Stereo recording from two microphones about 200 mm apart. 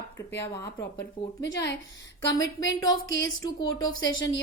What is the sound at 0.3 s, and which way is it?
Speech, 15° left (ahead or behind).